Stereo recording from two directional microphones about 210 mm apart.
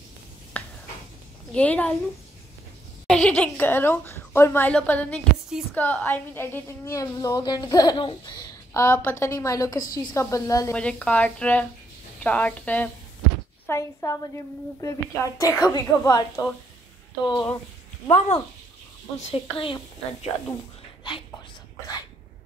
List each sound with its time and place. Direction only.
0.5 s a sound: 10° left (ahead or behind)
1.5 s a woman's voice: 5° left (ahead or behind)
3.1 s a woman's voice: 5° left (ahead or behind); by 21.2 s 20° left (ahead or behind)